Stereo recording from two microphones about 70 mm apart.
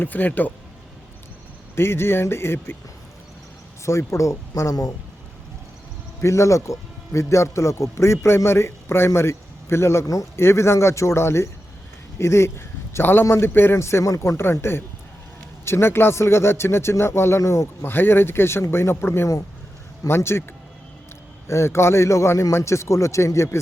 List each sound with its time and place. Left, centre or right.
0.0 s speech: left
1.7 s a man's voice: left
3.8 s speech: left
6.2 s a man's voice: left
17.8 s a man's voice: left
21.4 s a man's voice: left